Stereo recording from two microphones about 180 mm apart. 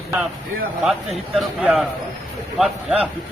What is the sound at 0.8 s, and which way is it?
A man's voice, centre (ahead or behind).